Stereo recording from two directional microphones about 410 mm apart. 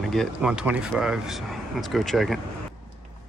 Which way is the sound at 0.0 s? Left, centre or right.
Centre.